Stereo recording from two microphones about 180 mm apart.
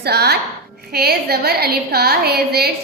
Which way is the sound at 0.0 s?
65° right (ahead or behind).